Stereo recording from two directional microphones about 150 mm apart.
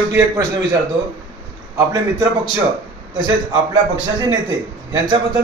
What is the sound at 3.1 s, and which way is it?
Speech, 25° right (ahead or behind).